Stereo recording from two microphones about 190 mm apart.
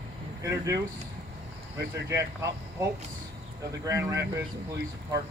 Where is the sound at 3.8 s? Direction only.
15° right (ahead or behind).